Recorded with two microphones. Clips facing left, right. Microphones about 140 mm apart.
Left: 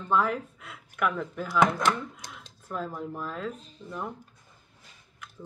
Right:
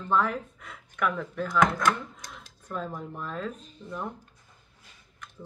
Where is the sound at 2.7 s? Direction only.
5° left (ahead or behind).